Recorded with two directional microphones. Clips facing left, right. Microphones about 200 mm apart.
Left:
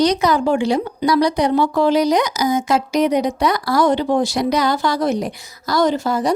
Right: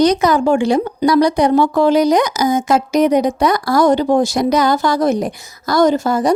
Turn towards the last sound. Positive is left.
turn(degrees=-50)  # may be behind; listen again after turning